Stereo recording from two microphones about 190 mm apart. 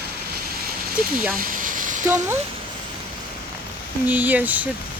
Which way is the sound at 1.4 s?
45° right (ahead or behind).